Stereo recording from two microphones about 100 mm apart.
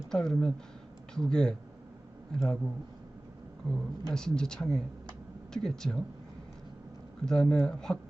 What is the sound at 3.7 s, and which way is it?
Speech, 5° left (ahead or behind).